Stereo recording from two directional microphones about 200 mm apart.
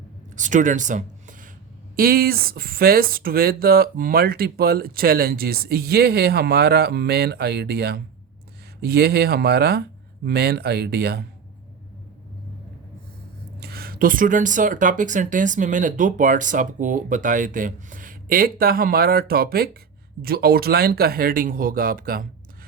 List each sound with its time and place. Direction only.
0.3 s speech: 40° right (ahead or behind)
13.6 s speech: 50° right (ahead or behind)